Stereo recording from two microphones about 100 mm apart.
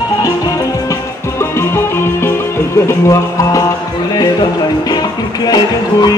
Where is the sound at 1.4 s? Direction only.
25° left (ahead or behind).